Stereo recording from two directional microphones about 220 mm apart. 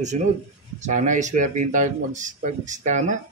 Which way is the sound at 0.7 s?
35° right (ahead or behind).